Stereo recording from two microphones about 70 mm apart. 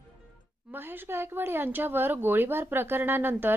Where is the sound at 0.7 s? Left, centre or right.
Right.